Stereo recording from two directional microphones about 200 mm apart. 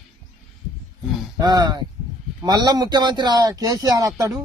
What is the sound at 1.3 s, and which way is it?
Speech, 20° right (ahead or behind).